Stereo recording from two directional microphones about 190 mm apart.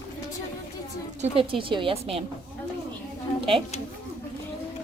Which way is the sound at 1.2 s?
30° right (ahead or behind).